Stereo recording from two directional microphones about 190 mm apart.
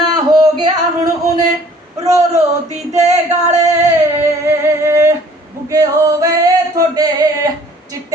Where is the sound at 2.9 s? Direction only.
35° right (ahead or behind).